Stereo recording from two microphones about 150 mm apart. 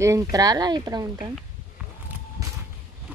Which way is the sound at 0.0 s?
20° right (ahead or behind).